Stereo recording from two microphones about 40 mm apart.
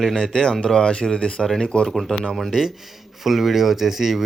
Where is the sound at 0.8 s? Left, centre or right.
Centre.